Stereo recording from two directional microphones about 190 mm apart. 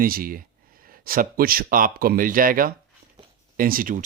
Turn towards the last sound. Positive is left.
turn(degrees=-45)  # may be behind; listen again after turning